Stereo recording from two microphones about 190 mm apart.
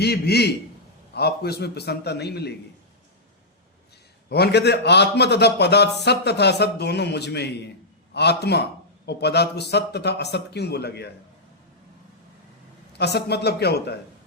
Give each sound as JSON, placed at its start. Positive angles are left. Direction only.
{"t": 0.0, "sound": "a man's voice", "side_deg": 60}
{"t": 4.3, "sound": "a man's voice", "side_deg": 60}
{"t": 13.0, "sound": "a man's voice", "side_deg": 60}